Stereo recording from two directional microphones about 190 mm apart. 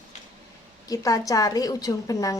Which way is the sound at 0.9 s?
15° left (ahead or behind).